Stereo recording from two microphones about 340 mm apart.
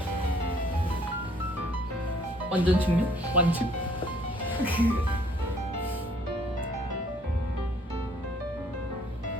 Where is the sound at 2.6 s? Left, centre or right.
Centre.